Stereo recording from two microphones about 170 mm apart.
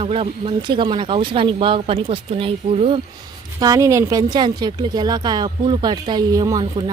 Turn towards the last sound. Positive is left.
turn(degrees=-20)  # may be behind; listen again after turning